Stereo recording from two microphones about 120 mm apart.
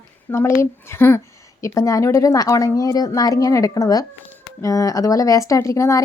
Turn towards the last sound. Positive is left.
turn(degrees=25)  # may be behind; listen again after turning